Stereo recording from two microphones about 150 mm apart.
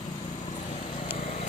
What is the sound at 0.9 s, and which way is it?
Vehicle, 40° left (ahead or behind).